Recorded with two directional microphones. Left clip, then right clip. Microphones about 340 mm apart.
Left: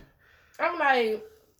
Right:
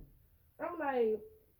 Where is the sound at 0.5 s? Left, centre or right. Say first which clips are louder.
Left 14 dB; centre.